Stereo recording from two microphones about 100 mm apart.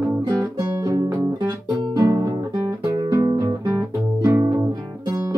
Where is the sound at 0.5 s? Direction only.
35° right (ahead or behind).